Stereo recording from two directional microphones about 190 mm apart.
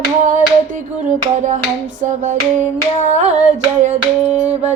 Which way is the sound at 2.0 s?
40° right (ahead or behind).